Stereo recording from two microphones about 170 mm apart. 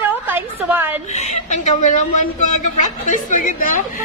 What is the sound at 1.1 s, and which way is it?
A woman's voice, 45° left (ahead or behind).